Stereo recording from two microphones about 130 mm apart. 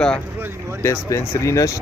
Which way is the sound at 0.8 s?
20° left (ahead or behind).